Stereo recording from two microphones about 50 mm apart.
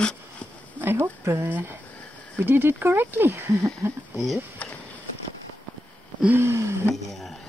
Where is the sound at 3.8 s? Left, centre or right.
Right.